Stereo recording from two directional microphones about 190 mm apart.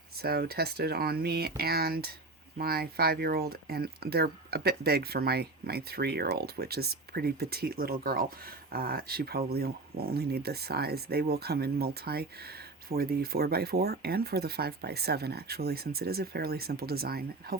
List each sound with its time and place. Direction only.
0.2 s speech: 55° right (ahead or behind)